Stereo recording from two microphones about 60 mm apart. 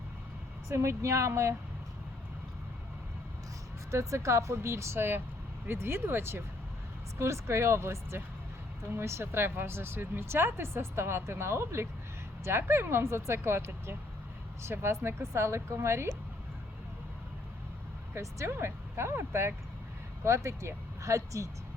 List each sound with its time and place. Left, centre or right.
0.7 s speech: right
3.9 s speech: right
18.1 s speech: right